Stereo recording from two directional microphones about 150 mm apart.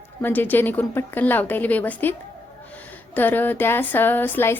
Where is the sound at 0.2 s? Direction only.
10° left (ahead or behind).